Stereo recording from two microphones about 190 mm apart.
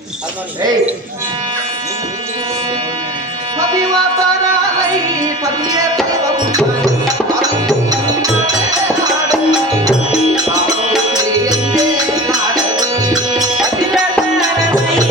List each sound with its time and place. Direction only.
9.3 s music: 20° right (ahead or behind)
13.3 s music: 20° right (ahead or behind)